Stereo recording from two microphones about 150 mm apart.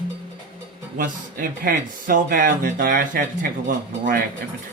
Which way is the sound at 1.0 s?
70° right (ahead or behind).